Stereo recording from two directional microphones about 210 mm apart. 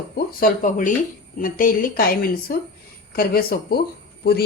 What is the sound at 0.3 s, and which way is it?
Speech, 40° left (ahead or behind).